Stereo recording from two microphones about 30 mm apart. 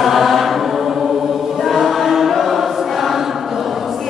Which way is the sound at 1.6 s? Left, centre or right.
Centre.